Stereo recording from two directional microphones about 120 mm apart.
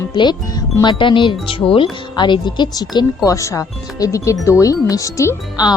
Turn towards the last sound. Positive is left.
turn(degrees=30)  # may be behind; listen again after turning